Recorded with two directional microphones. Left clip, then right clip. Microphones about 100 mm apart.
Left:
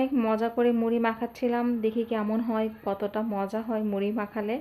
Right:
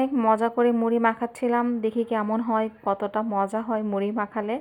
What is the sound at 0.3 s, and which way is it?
A woman's voice, 35° right (ahead or behind).